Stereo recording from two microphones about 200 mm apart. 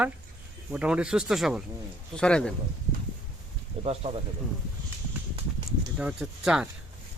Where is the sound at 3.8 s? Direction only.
30° right (ahead or behind).